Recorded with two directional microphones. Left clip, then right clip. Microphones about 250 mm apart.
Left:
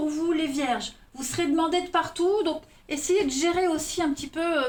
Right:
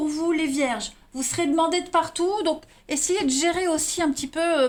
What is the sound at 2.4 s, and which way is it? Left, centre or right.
A woman's voice, right.